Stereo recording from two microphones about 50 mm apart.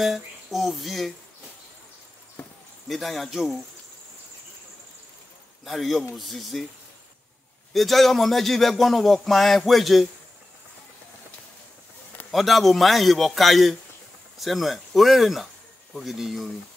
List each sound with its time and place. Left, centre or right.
0.0 s speech: centre
2.9 s speech: centre
5.7 s speech: centre
7.7 s speech: centre
12.3 s speech: centre